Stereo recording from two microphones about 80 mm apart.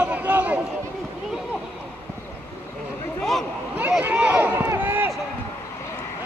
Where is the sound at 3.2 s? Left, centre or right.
Centre.